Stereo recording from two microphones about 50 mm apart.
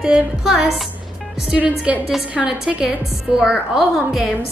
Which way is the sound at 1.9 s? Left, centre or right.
Centre.